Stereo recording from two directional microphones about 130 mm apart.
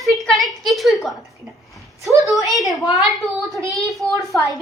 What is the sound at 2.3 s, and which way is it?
A woman's voice, centre (ahead or behind).